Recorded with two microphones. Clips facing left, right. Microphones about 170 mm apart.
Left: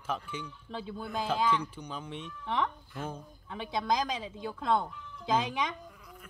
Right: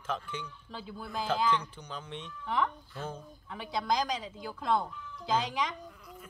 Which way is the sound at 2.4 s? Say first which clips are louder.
Right 1 dB; 30° left (ahead or behind).